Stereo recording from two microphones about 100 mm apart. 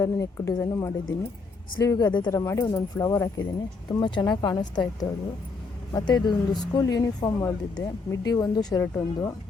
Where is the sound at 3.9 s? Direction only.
50° left (ahead or behind).